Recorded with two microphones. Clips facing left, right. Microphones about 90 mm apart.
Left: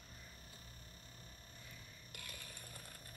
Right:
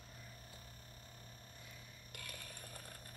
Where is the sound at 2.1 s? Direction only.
50° right (ahead or behind).